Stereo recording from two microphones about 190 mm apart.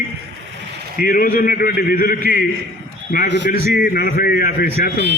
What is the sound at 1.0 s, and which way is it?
A man's voice, 45° left (ahead or behind).